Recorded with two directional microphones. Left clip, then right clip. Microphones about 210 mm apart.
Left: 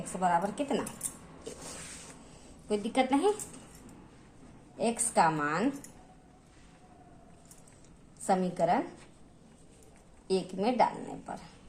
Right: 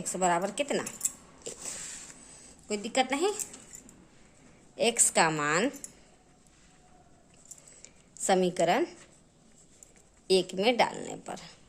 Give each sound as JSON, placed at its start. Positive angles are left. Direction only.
{"t": 0.0, "sound": "speech", "side_deg": -45}
{"t": 2.6, "sound": "speech", "side_deg": -35}
{"t": 4.8, "sound": "a woman's voice", "side_deg": -40}
{"t": 8.3, "sound": "a woman's voice", "side_deg": -45}
{"t": 10.2, "sound": "speech", "side_deg": -40}